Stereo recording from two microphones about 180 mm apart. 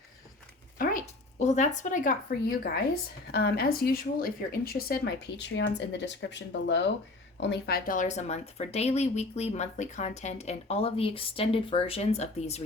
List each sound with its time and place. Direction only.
0.8 s speech: 45° left (ahead or behind); by 7.8 s 70° left (ahead or behind)
7.9 s speech: 45° left (ahead or behind)